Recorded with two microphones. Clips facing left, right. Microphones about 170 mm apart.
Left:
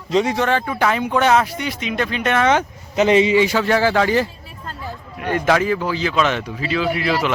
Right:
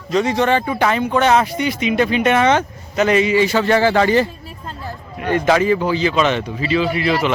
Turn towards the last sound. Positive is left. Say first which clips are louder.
# right 2 dB
turn(degrees=0)  # may be behind; listen again after turning